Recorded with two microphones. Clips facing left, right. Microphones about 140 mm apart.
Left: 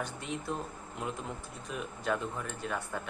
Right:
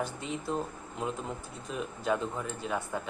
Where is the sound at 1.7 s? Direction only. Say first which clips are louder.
Right 3 dB; 5° right (ahead or behind).